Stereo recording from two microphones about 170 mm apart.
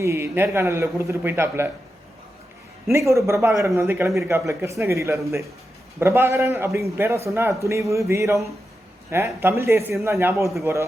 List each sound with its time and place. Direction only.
0.0 s a man's voice: 15° right (ahead or behind)
2.9 s a man's voice: 15° right (ahead or behind)